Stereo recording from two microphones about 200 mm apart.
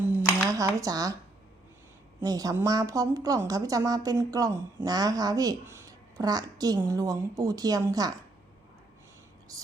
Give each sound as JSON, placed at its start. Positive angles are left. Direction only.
{"t": 0.4, "sound": "speech", "side_deg": -15}
{"t": 2.2, "sound": "speech", "side_deg": -20}